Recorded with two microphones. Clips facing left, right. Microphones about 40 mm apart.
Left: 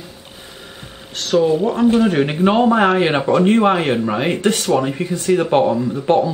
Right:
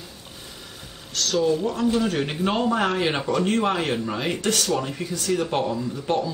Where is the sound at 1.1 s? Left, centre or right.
Left.